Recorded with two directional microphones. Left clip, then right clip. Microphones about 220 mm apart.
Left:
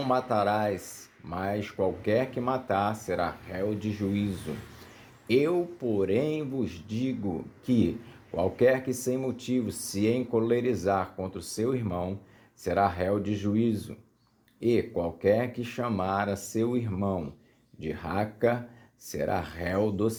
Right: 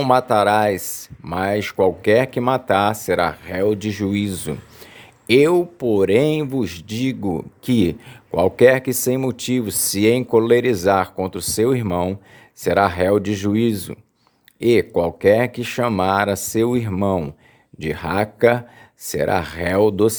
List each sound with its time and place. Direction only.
0.0 s speech: 35° right (ahead or behind)